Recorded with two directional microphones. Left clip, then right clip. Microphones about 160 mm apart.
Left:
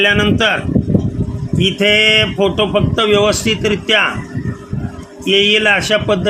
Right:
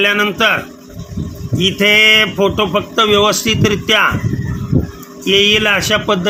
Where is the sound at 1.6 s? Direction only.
20° right (ahead or behind).